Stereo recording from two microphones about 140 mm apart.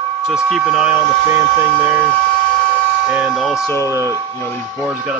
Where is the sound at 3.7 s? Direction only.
20° left (ahead or behind).